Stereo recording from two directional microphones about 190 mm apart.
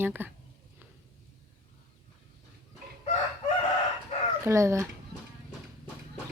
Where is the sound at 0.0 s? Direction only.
10° right (ahead or behind).